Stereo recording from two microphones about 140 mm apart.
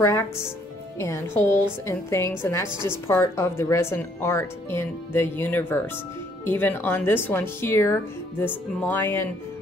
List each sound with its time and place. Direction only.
0.0 s a woman's voice: 20° left (ahead or behind)